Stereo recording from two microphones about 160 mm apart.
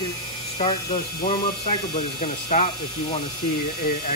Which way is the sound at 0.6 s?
35° left (ahead or behind).